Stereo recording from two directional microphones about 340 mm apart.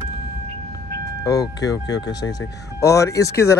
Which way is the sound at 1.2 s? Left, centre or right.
Centre.